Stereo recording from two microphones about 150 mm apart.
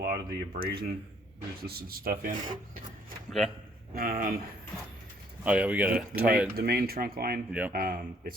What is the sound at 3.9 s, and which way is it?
Speech, 70° right (ahead or behind).